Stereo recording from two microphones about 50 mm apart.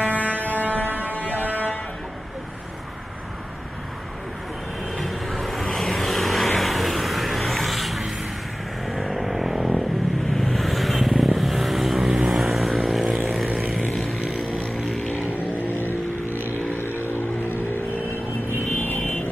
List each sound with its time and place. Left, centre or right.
0.0 s a sound: left
0.8 s buzzer: right
4.9 s vehicle: centre
15.3 s vehicle: left
17.0 s vehicle: left